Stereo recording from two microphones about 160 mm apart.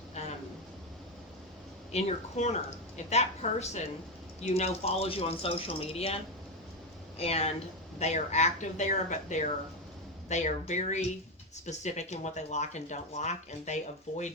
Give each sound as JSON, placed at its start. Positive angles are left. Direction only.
{"t": 0.1, "sound": "a sound", "side_deg": 45}
{"t": 1.9, "sound": "speech", "side_deg": 45}
{"t": 7.2, "sound": "speech", "side_deg": 40}